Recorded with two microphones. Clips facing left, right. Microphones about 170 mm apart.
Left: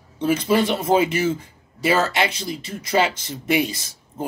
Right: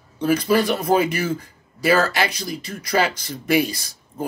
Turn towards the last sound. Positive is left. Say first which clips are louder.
# right 1 dB
turn(degrees=20)  # may be behind; listen again after turning